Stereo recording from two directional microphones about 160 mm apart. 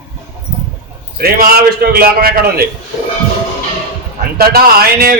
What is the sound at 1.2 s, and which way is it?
A man's voice, 70° right (ahead or behind).